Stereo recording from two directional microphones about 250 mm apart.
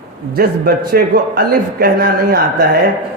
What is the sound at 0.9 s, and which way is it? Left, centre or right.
Speech, right.